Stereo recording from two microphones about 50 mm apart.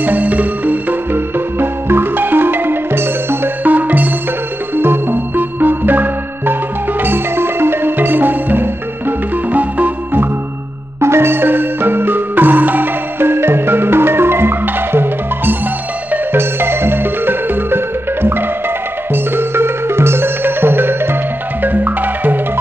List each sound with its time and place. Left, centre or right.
0.0 s music: right
3.6 s music: right
11.0 s music: right
21.6 s music: right